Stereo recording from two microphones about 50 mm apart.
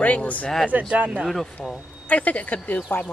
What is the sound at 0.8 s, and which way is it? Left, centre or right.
Speech, right.